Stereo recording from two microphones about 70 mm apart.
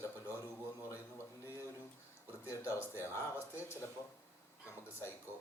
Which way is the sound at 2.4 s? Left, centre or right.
Left.